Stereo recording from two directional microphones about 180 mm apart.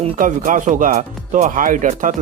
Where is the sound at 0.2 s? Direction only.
45° right (ahead or behind).